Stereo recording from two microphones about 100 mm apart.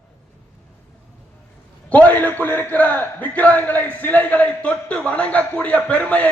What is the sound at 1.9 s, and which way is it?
A man's voice, 15° left (ahead or behind).